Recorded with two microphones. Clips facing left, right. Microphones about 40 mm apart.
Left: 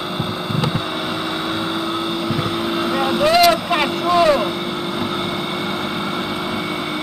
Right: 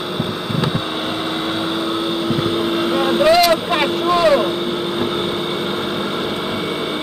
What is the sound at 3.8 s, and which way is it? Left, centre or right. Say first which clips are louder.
Boat: right 2 dB; right.